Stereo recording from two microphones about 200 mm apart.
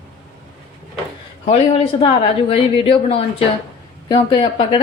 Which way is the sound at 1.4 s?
30° left (ahead or behind).